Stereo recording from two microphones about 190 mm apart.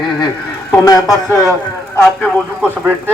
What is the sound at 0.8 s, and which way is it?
Speech, 20° left (ahead or behind).